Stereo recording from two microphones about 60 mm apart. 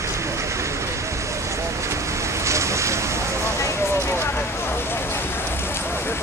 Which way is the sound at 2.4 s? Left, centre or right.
Right.